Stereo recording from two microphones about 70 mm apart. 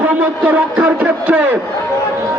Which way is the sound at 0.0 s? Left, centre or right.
Right.